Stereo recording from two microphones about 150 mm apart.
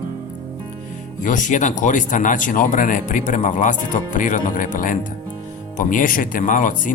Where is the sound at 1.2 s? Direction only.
60° left (ahead or behind).